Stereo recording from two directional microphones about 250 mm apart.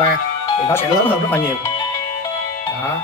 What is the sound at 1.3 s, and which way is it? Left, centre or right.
Music, centre.